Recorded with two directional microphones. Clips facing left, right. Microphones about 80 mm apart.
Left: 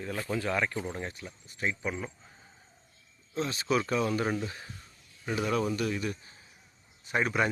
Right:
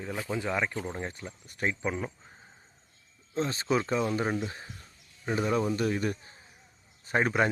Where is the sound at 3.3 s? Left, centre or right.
Right.